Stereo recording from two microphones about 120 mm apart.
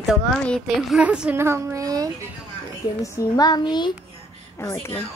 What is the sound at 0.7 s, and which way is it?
Speech, 5° right (ahead or behind).